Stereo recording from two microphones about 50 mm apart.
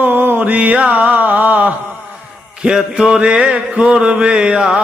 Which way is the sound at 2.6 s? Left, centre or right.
Centre.